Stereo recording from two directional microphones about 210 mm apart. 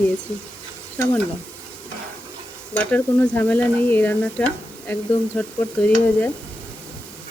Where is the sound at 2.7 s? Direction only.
5° left (ahead or behind).